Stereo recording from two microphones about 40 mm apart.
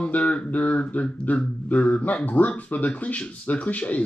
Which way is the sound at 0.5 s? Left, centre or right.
Left.